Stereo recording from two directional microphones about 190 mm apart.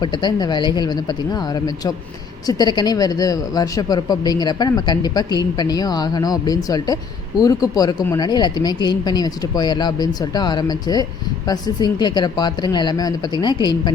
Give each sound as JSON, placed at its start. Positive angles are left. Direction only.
{"t": 0.0, "sound": "speech", "side_deg": 25}